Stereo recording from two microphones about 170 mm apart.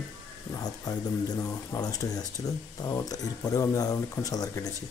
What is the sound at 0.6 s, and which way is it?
Speech, 25° left (ahead or behind).